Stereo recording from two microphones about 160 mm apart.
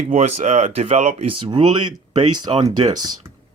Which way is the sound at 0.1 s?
45° right (ahead or behind).